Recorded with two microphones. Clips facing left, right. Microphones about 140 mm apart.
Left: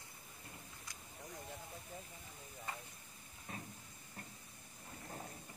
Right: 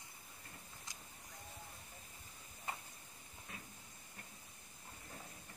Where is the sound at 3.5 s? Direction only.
35° left (ahead or behind).